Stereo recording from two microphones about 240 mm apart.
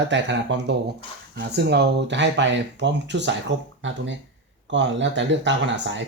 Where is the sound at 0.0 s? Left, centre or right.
Right.